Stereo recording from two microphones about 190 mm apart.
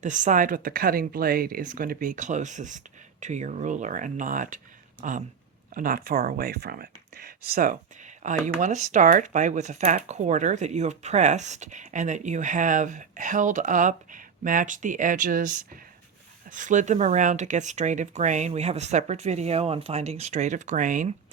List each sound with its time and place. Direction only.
0.0 s speech: 40° right (ahead or behind)